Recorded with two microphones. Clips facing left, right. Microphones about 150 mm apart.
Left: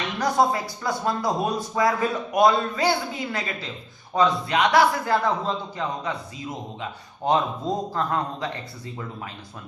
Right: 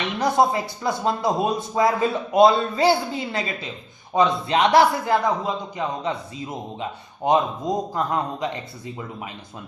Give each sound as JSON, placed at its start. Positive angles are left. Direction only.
{"t": 0.2, "sound": "a man's voice", "side_deg": -25}
{"t": 5.2, "sound": "a man's voice", "side_deg": -15}
{"t": 7.3, "sound": "a man's voice", "side_deg": -15}